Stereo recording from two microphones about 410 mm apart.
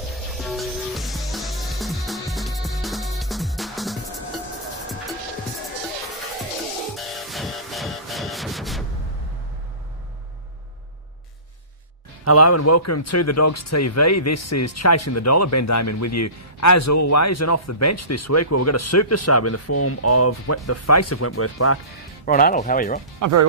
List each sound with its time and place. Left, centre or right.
0.1 s music: centre
7.0 s music: centre
12.3 s speech: left
22.2 s speech: centre